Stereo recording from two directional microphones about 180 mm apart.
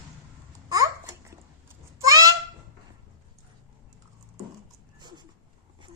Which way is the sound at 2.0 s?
20° right (ahead or behind).